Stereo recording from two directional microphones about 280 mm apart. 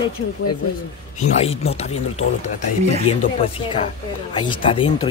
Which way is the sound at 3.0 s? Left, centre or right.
Centre.